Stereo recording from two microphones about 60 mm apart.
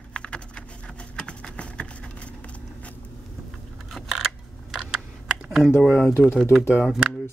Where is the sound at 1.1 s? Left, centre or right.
Centre.